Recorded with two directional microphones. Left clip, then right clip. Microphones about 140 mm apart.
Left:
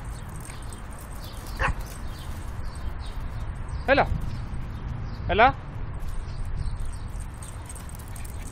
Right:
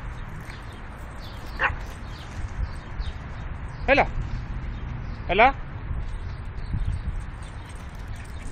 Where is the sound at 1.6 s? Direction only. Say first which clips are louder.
Right 3 dB; 15° left (ahead or behind).